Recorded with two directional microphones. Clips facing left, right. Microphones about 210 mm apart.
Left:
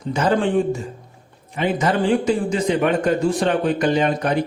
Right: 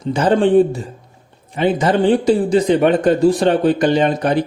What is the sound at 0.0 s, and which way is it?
A man's voice, 30° right (ahead or behind).